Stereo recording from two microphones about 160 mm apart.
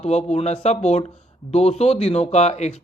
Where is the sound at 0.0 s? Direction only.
45° left (ahead or behind).